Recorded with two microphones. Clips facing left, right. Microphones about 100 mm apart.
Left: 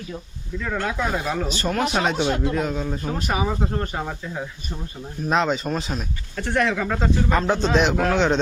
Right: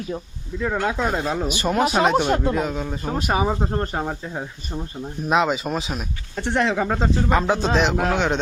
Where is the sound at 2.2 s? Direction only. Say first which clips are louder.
Right 3 dB; 45° right (ahead or behind).